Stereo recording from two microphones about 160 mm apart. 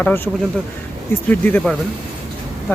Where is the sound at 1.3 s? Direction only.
10° left (ahead or behind).